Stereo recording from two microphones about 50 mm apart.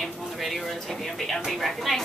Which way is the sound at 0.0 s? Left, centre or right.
Centre.